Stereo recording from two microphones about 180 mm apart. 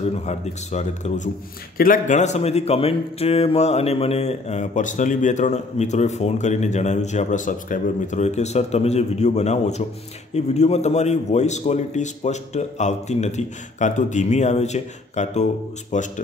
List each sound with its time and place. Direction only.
0.1 s speech: 40° left (ahead or behind)